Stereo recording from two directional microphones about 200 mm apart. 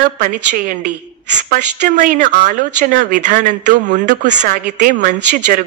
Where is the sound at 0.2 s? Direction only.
40° right (ahead or behind).